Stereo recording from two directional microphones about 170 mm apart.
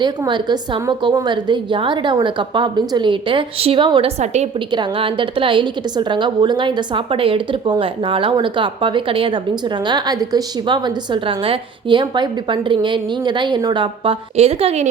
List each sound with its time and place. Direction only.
0.0 s a woman's voice: 25° right (ahead or behind)